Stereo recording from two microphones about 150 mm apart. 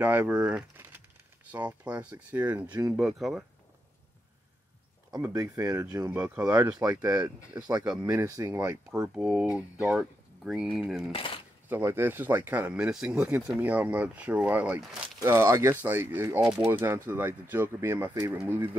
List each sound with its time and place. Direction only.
0.0 s speech: 10° right (ahead or behind)
5.1 s speech: 25° right (ahead or behind)
6.8 s speech: 25° right (ahead or behind)
9.1 s speech: 5° right (ahead or behind)
11.1 s speech: 35° left (ahead or behind)
11.7 s speech: 15° right (ahead or behind)